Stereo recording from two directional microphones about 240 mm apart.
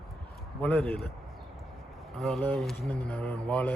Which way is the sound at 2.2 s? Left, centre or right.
Centre.